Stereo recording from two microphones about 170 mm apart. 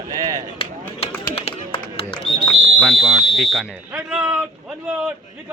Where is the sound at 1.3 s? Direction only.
35° left (ahead or behind).